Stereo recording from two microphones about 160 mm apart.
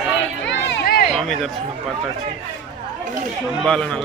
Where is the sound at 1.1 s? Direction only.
Centre (ahead or behind).